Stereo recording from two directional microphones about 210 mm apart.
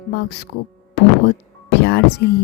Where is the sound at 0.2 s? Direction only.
55° left (ahead or behind).